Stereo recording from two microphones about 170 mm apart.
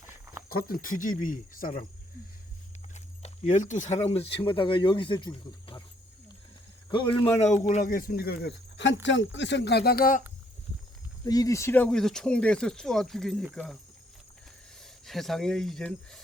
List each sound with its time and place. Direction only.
0.0 s a sound: 15° right (ahead or behind)
0.5 s speech: 55° left (ahead or behind)
2.9 s speech: 45° left (ahead or behind); by 5.8 s 30° left (ahead or behind)
6.9 s speech: 30° left (ahead or behind); by 10.2 s 55° left (ahead or behind)
11.3 s speech: 20° left (ahead or behind); by 13.7 s centre (ahead or behind)
15.0 s speech: centre (ahead or behind)